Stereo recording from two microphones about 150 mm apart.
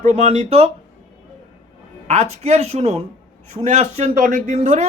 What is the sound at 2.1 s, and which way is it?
Speech, 50° right (ahead or behind).